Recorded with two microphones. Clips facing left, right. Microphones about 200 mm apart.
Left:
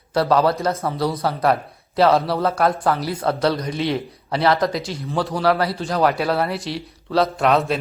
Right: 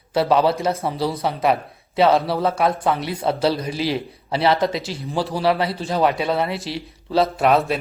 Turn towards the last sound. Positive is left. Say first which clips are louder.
# right 1 dB
turn(degrees=0)  # may be behind; listen again after turning